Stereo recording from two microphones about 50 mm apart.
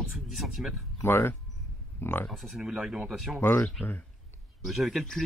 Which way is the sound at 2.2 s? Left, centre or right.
Centre.